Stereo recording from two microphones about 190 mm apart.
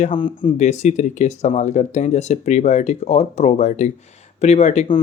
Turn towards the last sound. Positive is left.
turn(degrees=35)  # may be behind; listen again after turning